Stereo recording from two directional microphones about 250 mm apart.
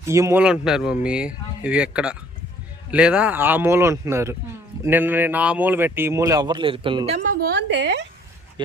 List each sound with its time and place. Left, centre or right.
0.0 s speech: centre
7.3 s a woman's voice: right